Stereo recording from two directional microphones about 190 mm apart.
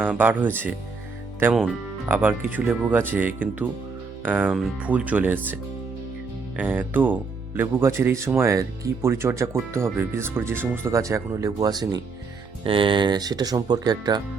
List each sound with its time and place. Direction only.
0.0 s speech: 10° right (ahead or behind)
2.0 s speech: 10° right (ahead or behind)
6.6 s speech: 10° right (ahead or behind)